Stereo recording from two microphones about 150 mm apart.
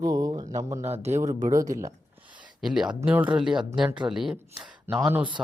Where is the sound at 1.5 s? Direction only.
20° right (ahead or behind).